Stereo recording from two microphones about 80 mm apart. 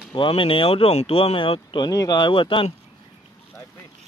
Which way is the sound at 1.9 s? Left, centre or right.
Left.